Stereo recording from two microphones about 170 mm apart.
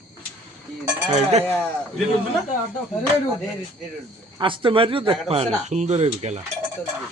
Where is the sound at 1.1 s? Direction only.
40° right (ahead or behind).